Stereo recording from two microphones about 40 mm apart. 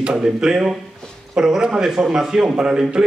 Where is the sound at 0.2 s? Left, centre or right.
Centre.